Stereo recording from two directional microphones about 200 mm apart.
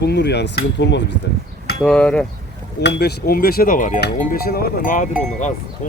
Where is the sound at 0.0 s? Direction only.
55° left (ahead or behind).